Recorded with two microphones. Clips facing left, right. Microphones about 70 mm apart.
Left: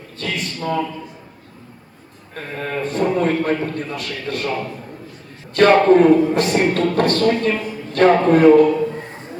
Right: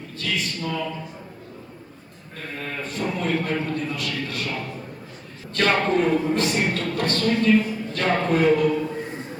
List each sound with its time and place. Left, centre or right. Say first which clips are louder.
0.2 s a man's voice: left 3 dB; left
2.3 s a man's voice: left 7 dB; left
5.5 s a man's voice: left 9 dB; left